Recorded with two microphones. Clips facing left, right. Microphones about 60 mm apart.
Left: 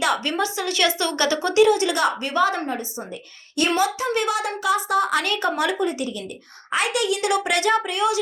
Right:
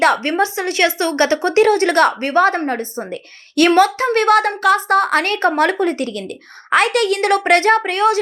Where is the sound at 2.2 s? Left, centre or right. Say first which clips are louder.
Right 6 dB; right.